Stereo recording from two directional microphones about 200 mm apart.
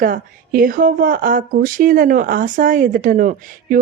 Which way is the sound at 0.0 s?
45° right (ahead or behind).